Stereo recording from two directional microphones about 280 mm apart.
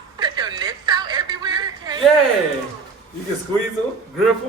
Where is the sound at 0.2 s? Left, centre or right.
Centre.